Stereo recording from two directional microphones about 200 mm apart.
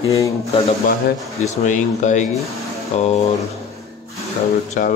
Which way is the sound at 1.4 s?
35° left (ahead or behind).